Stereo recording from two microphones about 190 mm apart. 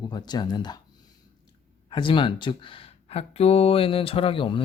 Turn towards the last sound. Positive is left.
turn(degrees=25)  # may be behind; listen again after turning